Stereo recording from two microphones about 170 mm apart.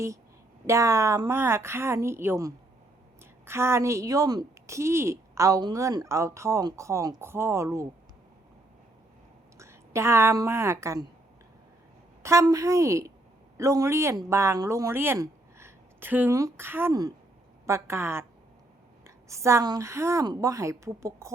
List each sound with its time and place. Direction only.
0.7 s a woman's voice: 20° right (ahead or behind)
9.6 s a woman's voice: 15° right (ahead or behind)
12.2 s a woman's voice: 20° right (ahead or behind)